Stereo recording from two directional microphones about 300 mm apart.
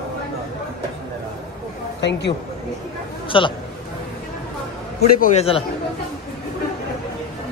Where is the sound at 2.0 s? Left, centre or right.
Left.